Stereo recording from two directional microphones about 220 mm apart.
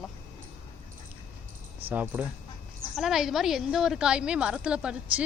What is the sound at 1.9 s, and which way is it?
A woman's voice, 5° right (ahead or behind).